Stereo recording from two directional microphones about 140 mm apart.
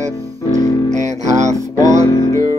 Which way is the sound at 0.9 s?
60° right (ahead or behind).